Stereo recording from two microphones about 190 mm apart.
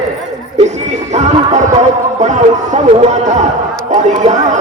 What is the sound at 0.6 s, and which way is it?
Music, 35° right (ahead or behind).